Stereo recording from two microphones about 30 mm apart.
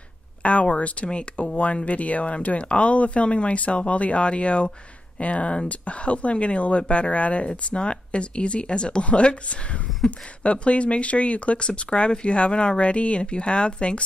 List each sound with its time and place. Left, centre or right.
0.4 s speech: left
11.5 s speech: left